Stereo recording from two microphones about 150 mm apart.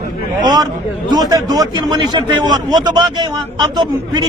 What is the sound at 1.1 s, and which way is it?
A man's voice, 25° right (ahead or behind).